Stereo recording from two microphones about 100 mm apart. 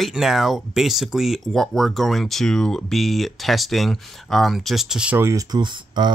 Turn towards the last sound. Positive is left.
turn(degrees=-50)  # may be behind; listen again after turning